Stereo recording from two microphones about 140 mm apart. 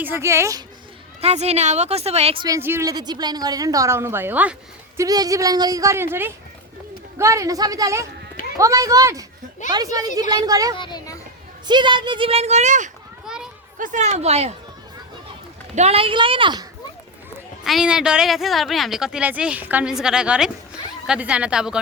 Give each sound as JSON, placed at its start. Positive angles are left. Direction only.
{"t": 0.0, "sound": "speech", "side_deg": -15}
{"t": 1.2, "sound": "a woman's voice", "side_deg": -50}
{"t": 2.6, "sound": "speech", "side_deg": -15}
{"t": 2.8, "sound": "speech", "side_deg": -30}
{"t": 4.9, "sound": "speech", "side_deg": -25}
{"t": 10.8, "sound": "speech", "side_deg": 30}
{"t": 11.6, "sound": "a woman's voice", "side_deg": -35}
{"t": 13.2, "sound": "children playing", "side_deg": -5}
{"t": 13.7, "sound": "speech", "side_deg": -65}
{"t": 15.7, "sound": "a woman's voice", "side_deg": -50}
{"t": 17.6, "sound": "a woman's voice", "side_deg": -5}